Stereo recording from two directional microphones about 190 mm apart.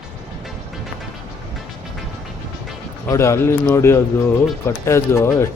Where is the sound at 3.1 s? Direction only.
15° left (ahead or behind).